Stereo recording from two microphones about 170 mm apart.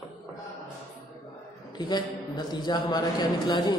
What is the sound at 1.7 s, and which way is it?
A man's voice, 25° left (ahead or behind).